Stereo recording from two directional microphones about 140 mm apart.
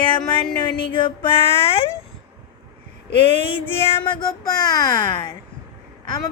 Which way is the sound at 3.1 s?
40° left (ahead or behind).